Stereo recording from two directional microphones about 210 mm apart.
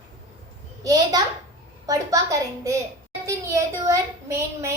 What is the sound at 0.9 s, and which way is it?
A child's voice, 15° right (ahead or behind).